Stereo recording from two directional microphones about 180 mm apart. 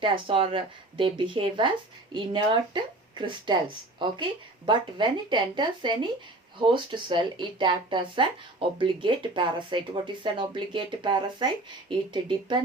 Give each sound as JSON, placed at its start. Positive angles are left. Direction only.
{"t": 0.0, "sound": "speech", "side_deg": -30}